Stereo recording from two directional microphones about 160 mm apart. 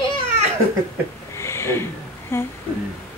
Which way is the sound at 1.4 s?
15° left (ahead or behind).